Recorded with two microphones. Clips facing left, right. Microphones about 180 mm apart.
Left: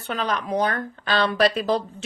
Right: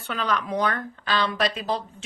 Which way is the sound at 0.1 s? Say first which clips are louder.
Left 2 dB; 40° left (ahead or behind).